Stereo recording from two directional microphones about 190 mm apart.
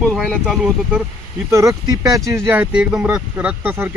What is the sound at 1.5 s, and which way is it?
Speech, 15° right (ahead or behind).